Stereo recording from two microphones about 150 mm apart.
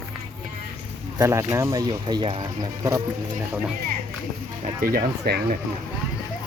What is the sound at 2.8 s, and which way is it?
Speech, 20° right (ahead or behind).